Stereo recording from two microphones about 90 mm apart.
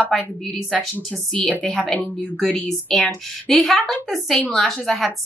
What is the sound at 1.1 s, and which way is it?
A woman's voice, 10° left (ahead or behind).